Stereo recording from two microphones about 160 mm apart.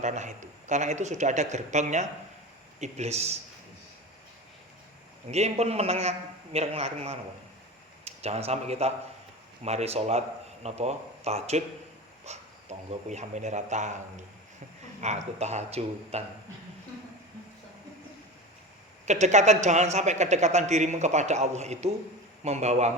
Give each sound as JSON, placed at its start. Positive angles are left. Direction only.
{"t": 0.0, "sound": "a man's voice", "side_deg": -50}
{"t": 5.3, "sound": "a man's voice", "side_deg": -40}
{"t": 15.0, "sound": "speech", "side_deg": -45}
{"t": 19.0, "sound": "speech", "side_deg": -45}